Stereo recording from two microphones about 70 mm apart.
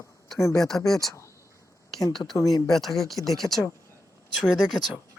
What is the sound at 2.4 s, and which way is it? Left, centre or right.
Speech, left.